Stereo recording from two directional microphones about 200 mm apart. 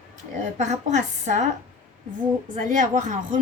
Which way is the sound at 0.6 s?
35° right (ahead or behind).